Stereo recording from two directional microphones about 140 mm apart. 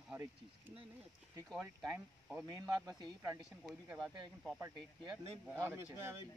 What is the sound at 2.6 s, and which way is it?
Speech, 30° right (ahead or behind).